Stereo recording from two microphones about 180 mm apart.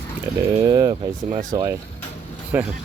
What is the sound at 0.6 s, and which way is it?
Speech, 20° right (ahead or behind).